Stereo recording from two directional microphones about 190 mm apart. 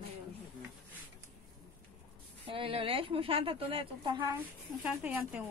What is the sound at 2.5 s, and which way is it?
A woman's voice, 30° right (ahead or behind).